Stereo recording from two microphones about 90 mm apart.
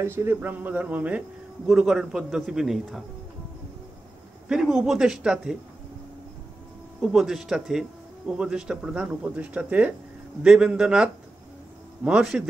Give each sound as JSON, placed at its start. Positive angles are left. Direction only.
{"t": 0.0, "sound": "a man's voice", "side_deg": -25}
{"t": 4.5, "sound": "speech", "side_deg": -5}
{"t": 7.0, "sound": "a man's voice", "side_deg": -5}